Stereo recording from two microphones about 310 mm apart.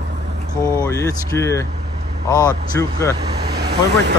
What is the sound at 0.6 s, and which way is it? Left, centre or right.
Speech, centre.